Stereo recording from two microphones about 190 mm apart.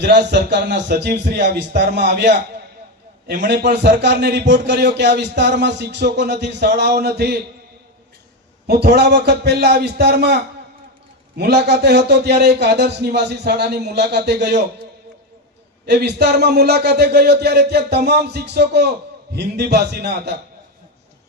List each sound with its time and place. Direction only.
0.0 s speech: 65° right (ahead or behind)
8.6 s speech: 60° right (ahead or behind)
15.9 s speech: 60° right (ahead or behind)